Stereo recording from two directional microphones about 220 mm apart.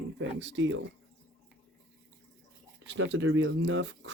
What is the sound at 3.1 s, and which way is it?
Speech, 60° right (ahead or behind).